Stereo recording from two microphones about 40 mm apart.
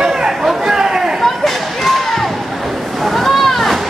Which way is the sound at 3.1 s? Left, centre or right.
Centre.